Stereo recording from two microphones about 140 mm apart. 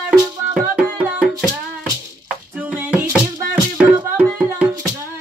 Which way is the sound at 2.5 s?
10° right (ahead or behind).